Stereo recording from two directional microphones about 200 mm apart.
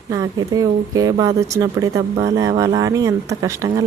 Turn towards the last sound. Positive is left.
turn(degrees=-15)  # may be behind; listen again after turning